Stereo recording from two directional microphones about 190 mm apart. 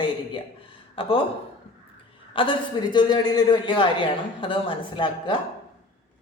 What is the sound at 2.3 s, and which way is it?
A woman's voice, 25° left (ahead or behind).